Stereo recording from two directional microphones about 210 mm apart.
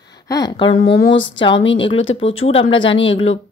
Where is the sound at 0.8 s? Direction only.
60° left (ahead or behind).